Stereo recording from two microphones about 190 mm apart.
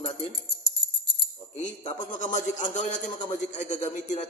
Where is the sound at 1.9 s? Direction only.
40° left (ahead or behind).